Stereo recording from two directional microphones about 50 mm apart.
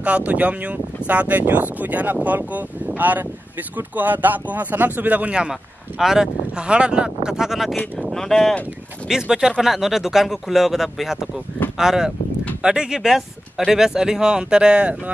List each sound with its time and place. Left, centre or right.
0.0 s speech: right
5.5 s speech: centre
6.5 s speech: right
8.1 s speech: centre
9.1 s speech: centre